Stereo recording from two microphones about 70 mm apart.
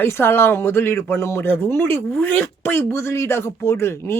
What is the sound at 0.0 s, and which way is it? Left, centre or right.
Speech, left.